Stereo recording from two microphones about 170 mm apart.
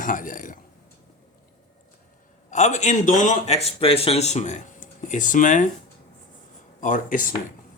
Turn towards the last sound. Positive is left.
turn(degrees=50)  # may be behind; listen again after turning